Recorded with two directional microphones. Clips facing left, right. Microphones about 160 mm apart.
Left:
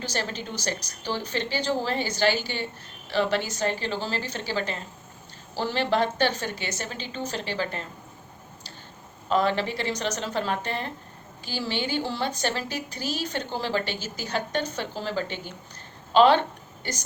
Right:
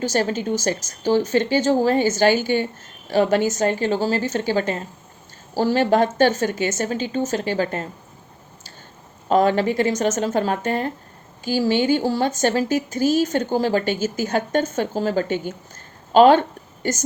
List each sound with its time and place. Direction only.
0.0 s speech: 45° right (ahead or behind)
9.3 s speech: 45° right (ahead or behind)